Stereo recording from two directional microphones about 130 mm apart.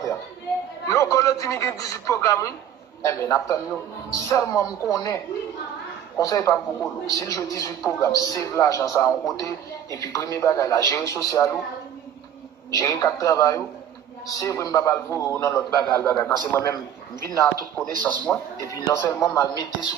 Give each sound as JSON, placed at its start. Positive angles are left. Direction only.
{"t": 0.8, "sound": "a man's voice", "side_deg": 25}
{"t": 12.7, "sound": "a man's voice", "side_deg": 25}
{"t": 16.0, "sound": "speech", "side_deg": 10}
{"t": 18.0, "sound": "speech", "side_deg": 10}
{"t": 18.7, "sound": "a man's voice", "side_deg": 30}